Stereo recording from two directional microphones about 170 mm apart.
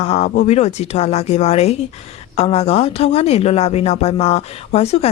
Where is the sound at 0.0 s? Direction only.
40° left (ahead or behind).